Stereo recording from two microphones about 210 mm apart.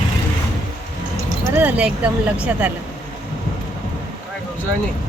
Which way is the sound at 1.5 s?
5° right (ahead or behind).